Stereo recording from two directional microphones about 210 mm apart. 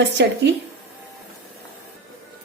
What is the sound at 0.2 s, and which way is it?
Speech, 55° right (ahead or behind).